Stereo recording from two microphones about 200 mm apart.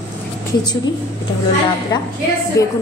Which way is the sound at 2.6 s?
15° left (ahead or behind).